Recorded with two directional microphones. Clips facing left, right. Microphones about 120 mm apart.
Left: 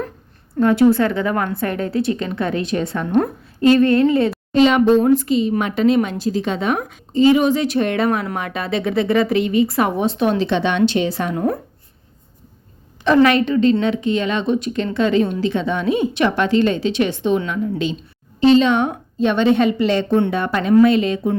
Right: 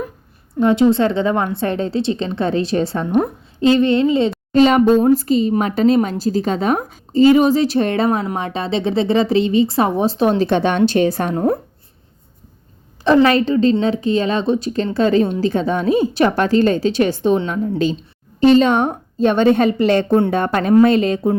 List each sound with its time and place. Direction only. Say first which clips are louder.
0.6 s a woman's voice: even; 20° right (ahead or behind)
3.1 s a woman's voice: even; 15° right (ahead or behind)
4.5 s speech: right 1 dB; 40° right (ahead or behind)
11.3 s speech: right 3 dB; 30° right (ahead or behind)
13.1 s a woman's voice: even; 30° right (ahead or behind)